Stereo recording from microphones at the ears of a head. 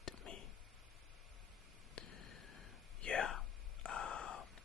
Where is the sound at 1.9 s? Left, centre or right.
Left.